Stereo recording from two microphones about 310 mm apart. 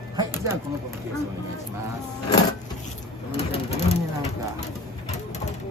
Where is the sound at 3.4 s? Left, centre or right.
Centre.